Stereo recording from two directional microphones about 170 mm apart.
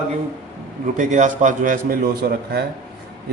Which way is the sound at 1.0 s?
45° right (ahead or behind).